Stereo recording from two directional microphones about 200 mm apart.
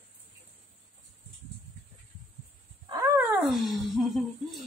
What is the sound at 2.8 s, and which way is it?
Wild animals, 15° right (ahead or behind).